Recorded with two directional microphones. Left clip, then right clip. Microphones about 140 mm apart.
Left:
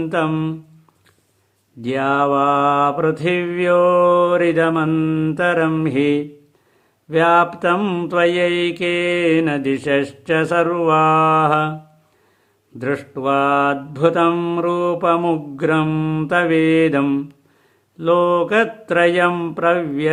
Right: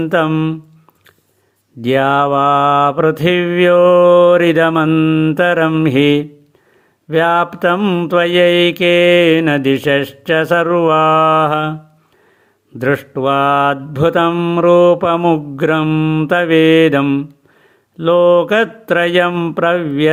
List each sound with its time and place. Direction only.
0.0 s mantra: 25° right (ahead or behind)
1.8 s mantra: 30° right (ahead or behind)
12.8 s mantra: 30° right (ahead or behind)